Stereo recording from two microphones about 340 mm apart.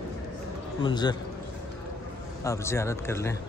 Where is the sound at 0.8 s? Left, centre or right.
Centre.